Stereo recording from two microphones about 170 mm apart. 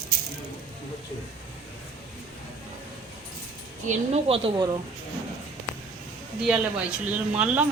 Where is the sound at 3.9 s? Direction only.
35° right (ahead or behind).